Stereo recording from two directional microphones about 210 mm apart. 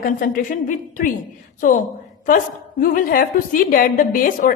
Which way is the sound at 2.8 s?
40° left (ahead or behind).